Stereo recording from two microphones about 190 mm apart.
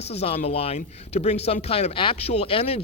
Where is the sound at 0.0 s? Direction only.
35° left (ahead or behind).